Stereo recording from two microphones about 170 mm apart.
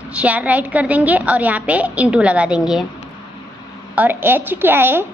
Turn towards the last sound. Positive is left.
turn(degrees=-10)  # may be behind; listen again after turning